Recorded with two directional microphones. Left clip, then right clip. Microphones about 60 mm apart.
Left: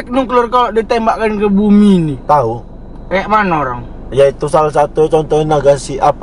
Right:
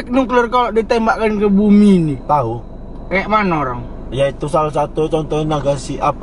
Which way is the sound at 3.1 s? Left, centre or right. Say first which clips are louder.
Left 3 dB; centre.